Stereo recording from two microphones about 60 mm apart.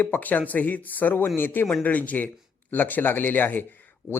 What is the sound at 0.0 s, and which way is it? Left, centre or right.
A man's voice, left.